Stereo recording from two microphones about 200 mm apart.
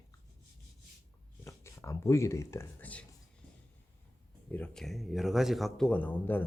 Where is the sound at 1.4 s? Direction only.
15° left (ahead or behind).